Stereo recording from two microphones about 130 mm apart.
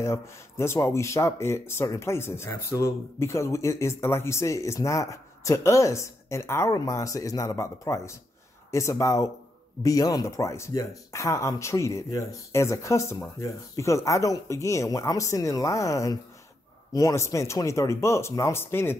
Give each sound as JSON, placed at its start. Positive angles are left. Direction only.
{"t": 0.0, "sound": "speech", "side_deg": 20}